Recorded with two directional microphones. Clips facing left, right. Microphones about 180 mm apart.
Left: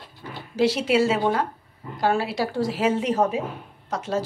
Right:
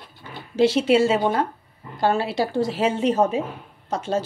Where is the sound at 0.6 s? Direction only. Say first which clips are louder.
Right 3 dB; 25° right (ahead or behind).